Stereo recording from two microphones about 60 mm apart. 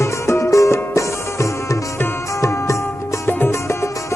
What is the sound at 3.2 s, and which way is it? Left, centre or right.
Music, left.